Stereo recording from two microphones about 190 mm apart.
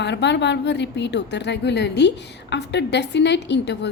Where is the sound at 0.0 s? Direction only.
65° left (ahead or behind).